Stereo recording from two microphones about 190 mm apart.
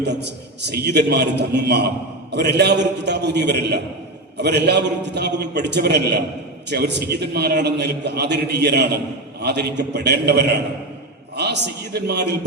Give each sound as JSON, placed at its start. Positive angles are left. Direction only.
{"t": 0.0, "sound": "a man's voice", "side_deg": -60}